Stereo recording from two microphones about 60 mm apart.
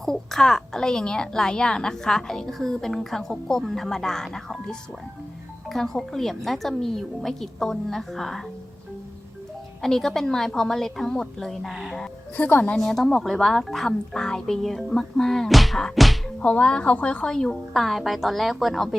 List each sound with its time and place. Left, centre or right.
0.0 s a woman's voice: centre
9.8 s a woman's voice: centre
12.4 s a woman's voice: left
12.7 s speech: centre
16.4 s a woman's voice: centre
17.2 s speech: centre